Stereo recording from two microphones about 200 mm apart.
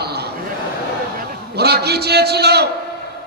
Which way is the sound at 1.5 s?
55° right (ahead or behind).